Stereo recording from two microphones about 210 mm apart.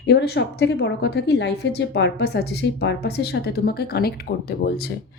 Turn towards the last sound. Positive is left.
turn(degrees=50)  # may be behind; listen again after turning